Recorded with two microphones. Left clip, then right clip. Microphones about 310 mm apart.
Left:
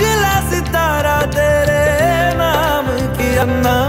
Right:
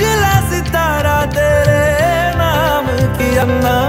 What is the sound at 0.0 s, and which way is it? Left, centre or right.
Music, centre.